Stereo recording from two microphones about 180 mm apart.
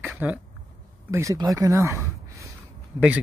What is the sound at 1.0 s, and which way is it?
Speech, 15° right (ahead or behind).